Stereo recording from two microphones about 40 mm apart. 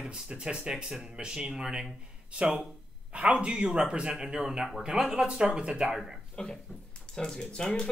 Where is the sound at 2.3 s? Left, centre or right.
Right; by 5.2 s centre.